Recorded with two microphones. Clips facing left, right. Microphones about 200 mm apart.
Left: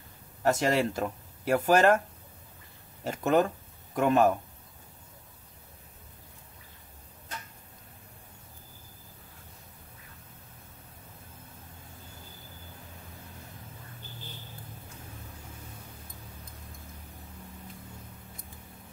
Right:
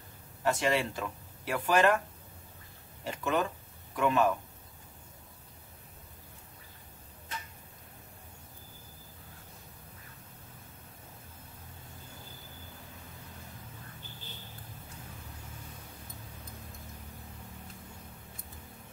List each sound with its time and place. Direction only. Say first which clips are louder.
0.4 s speech: left 4 dB; 45° left (ahead or behind)
3.0 s speech: left 6 dB; 45° left (ahead or behind)